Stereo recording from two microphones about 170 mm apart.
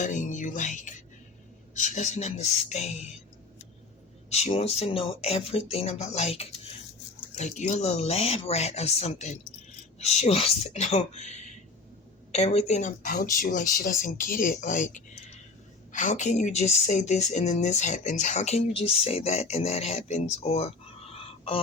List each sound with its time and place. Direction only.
0.0 s speech: 45° left (ahead or behind)
4.3 s a woman's voice: 40° left (ahead or behind)